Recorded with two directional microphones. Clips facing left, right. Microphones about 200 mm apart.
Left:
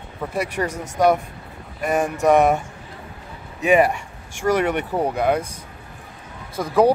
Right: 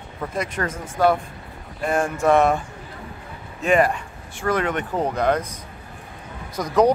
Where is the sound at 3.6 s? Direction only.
10° left (ahead or behind).